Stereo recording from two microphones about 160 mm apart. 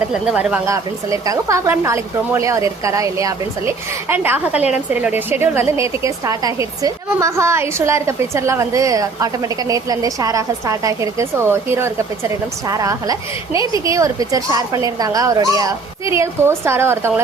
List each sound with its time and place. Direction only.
0.1 s speech: 5° right (ahead or behind)
0.7 s a woman's voice: 20° right (ahead or behind)